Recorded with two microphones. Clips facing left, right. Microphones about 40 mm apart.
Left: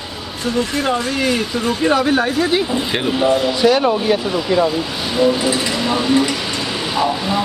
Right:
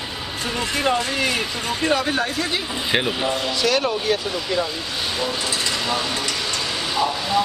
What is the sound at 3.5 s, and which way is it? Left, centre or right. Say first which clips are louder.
Speech: left 7 dB; centre.